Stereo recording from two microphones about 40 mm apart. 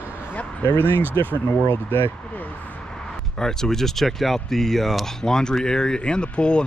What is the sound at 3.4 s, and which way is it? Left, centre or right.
Speech, centre.